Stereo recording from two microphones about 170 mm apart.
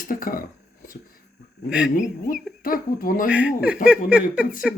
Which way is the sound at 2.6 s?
55° left (ahead or behind).